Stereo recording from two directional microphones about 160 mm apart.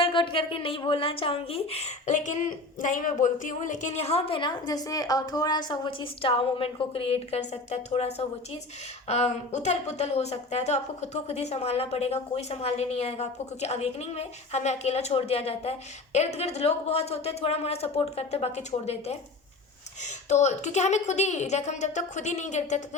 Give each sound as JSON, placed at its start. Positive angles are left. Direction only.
{"t": 0.0, "sound": "a woman's voice", "side_deg": 30}